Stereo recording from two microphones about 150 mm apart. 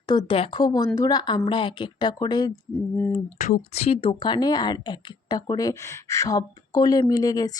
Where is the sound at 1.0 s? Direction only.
25° left (ahead or behind).